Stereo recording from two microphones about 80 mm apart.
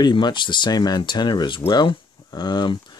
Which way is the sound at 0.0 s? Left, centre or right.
Left.